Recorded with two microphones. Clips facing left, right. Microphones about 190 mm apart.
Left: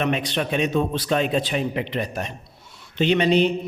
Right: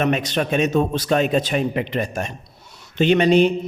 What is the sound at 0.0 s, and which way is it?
A man's voice, 45° right (ahead or behind).